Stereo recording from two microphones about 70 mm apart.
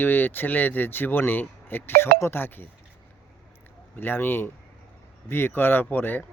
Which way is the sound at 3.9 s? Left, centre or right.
Left.